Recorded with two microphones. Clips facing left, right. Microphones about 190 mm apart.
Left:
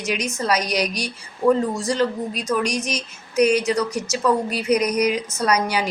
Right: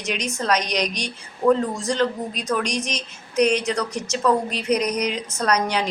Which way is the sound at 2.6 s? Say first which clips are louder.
Left 2 dB; 35° right (ahead or behind).